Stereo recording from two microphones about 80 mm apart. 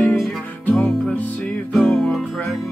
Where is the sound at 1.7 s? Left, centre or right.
Centre.